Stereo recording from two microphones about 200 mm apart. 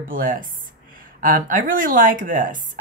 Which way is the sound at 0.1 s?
45° right (ahead or behind).